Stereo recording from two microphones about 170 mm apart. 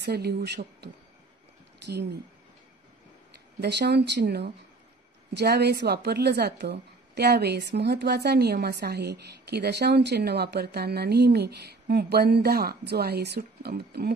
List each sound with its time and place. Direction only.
0.0 s a woman's voice: 75° right (ahead or behind)
1.8 s speech: 80° right
3.6 s a woman's voice: 80° right